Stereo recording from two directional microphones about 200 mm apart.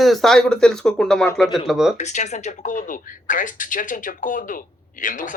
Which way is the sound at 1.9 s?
35° left (ahead or behind).